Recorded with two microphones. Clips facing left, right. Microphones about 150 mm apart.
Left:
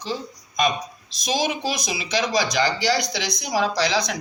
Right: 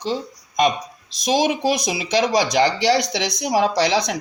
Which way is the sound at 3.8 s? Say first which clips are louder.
Right 3 dB; 25° right (ahead or behind).